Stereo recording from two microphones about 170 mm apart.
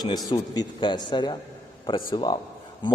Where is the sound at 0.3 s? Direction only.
25° left (ahead or behind).